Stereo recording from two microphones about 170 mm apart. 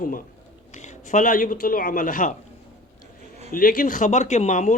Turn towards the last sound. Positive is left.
turn(degrees=45)  # may be behind; listen again after turning